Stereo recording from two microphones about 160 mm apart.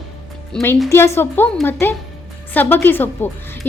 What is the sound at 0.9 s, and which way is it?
A woman's voice, 15° left (ahead or behind).